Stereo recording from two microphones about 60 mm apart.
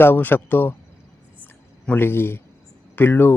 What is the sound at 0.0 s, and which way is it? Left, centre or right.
Speech, left.